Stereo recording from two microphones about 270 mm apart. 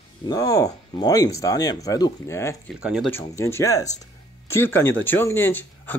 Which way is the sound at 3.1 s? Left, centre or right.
Centre.